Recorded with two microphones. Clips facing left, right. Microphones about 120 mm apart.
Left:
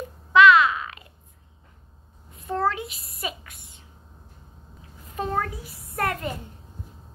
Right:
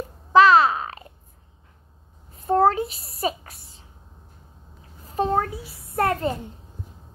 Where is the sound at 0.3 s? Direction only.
35° right (ahead or behind).